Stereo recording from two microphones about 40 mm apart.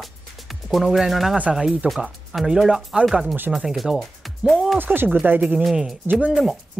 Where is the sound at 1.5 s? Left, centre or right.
Centre.